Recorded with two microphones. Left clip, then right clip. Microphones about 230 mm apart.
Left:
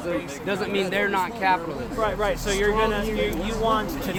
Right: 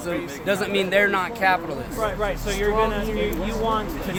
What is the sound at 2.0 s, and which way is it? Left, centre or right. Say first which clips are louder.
Speech: left 1 dB; left.